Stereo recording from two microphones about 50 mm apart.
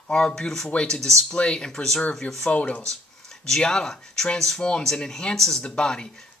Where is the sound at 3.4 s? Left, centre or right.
Centre.